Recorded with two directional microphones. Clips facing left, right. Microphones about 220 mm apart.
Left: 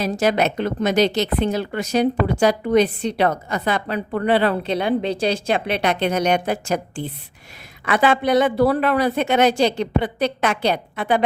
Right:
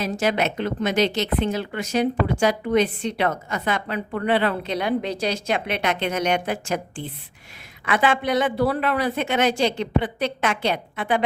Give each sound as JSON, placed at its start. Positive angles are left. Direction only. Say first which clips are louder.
{"t": 0.0, "sound": "a woman's voice", "louder": "left 3 dB", "side_deg": 40}